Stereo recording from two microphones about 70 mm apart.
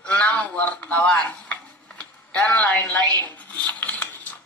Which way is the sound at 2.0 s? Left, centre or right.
Centre.